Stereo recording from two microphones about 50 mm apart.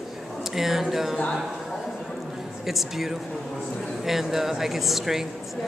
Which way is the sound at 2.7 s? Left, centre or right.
Centre.